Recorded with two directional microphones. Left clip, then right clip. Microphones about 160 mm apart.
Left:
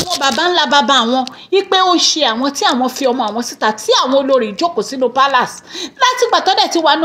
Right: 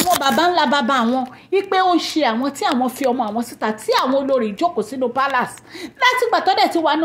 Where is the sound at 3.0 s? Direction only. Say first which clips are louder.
Left 4 dB; 30° right (ahead or behind).